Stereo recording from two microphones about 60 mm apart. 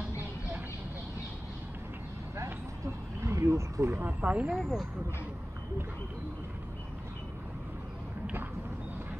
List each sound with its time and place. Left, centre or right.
2.3 s vehicle: right
4.0 s speech: right
4.6 s speech: centre